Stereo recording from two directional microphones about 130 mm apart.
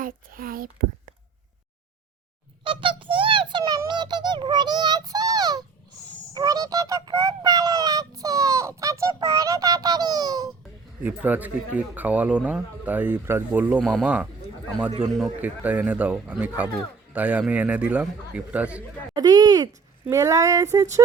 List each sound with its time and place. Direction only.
0.0 s whispering: 90° right
2.6 s a sound: 40° right (ahead or behind)
3.6 s a sound: 30° right (ahead or behind)
11.0 s speech: 15° right (ahead or behind)
13.8 s speech: centre (ahead or behind)
15.2 s speech: 10° right (ahead or behind)
19.1 s speech: 30° right (ahead or behind)